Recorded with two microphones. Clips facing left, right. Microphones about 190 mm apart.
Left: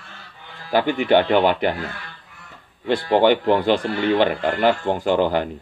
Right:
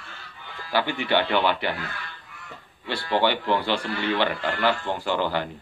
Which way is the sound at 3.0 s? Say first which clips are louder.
Left 6 dB; 50° left (ahead or behind).